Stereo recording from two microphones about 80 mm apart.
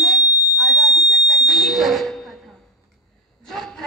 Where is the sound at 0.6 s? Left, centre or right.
Centre.